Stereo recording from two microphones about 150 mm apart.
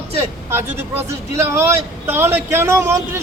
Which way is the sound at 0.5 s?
15° right (ahead or behind).